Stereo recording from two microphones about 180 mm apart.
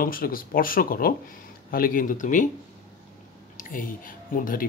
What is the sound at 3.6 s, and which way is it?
Speech, 50° left (ahead or behind).